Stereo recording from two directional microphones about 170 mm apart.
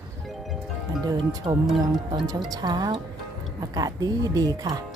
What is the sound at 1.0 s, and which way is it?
Speech, 20° right (ahead or behind).